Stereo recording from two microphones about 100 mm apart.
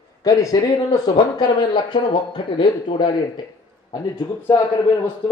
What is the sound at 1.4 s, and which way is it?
Speech, 50° left (ahead or behind).